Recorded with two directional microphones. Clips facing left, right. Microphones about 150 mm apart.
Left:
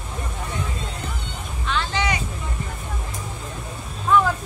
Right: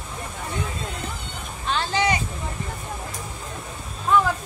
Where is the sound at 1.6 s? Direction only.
35° right (ahead or behind).